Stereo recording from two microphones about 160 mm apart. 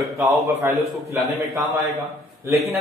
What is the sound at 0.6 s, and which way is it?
A man's voice, 15° right (ahead or behind).